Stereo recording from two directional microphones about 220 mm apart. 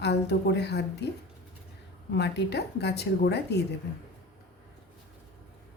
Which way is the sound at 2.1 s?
50° left (ahead or behind).